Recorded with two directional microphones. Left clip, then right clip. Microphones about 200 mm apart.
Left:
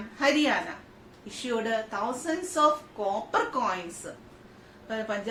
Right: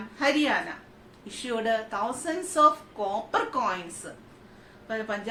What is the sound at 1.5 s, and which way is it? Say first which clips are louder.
Speech: right 2 dB; 10° right (ahead or behind).